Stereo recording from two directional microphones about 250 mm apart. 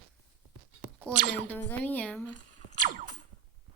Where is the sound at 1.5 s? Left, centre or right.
Centre.